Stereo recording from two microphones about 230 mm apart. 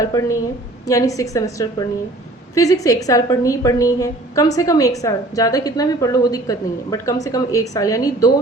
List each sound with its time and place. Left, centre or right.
0.1 s a woman's voice: centre